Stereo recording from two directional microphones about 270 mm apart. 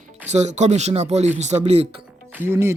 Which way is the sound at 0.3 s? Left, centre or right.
Right.